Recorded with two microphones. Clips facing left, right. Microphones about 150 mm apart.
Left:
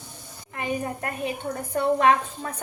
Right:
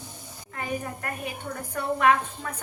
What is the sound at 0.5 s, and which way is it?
A woman's voice, 25° left (ahead or behind).